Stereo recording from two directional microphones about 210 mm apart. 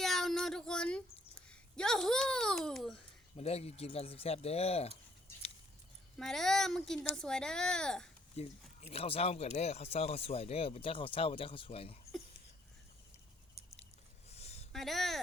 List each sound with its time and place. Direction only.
0.0 s a sound: centre (ahead or behind)
3.3 s speech: 30° left (ahead or behind)
6.1 s speech: centre (ahead or behind)
8.4 s speech: 30° left (ahead or behind)
14.3 s a sound: 30° left (ahead or behind)
14.7 s speech: centre (ahead or behind)